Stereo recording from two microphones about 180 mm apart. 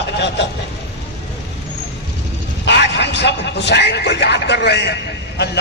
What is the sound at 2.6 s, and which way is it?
A man's voice, 70° left (ahead or behind).